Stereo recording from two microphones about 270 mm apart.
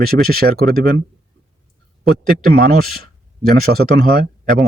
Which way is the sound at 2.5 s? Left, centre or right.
Right.